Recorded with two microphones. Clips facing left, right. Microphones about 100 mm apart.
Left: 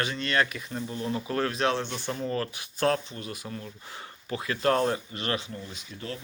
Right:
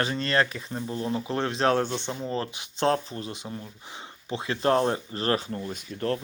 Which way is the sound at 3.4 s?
15° right (ahead or behind).